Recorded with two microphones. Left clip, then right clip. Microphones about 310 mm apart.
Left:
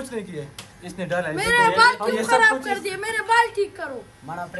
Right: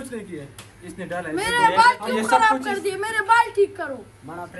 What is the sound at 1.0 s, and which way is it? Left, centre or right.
Speech, left.